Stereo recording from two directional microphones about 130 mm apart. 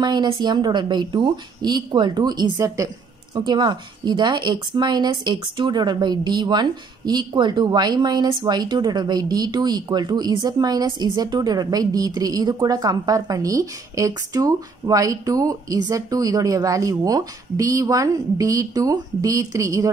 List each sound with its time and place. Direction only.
0.0 s speech: 35° right (ahead or behind)